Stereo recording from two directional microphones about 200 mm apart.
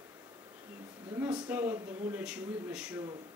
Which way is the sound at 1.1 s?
15° right (ahead or behind).